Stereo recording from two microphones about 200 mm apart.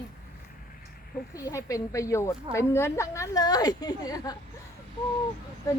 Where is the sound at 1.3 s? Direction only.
15° left (ahead or behind).